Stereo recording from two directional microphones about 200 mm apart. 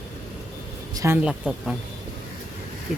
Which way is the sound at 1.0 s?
10° right (ahead or behind).